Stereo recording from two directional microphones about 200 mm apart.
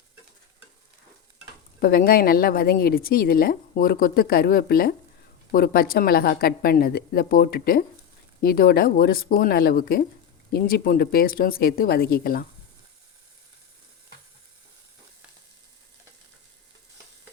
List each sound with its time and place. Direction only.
1.8 s a woman's voice: 50° left (ahead or behind)